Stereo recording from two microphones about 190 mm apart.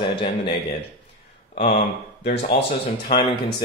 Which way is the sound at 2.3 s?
55° left (ahead or behind).